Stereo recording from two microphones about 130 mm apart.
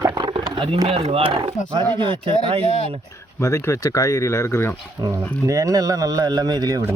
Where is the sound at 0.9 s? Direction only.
50° right (ahead or behind).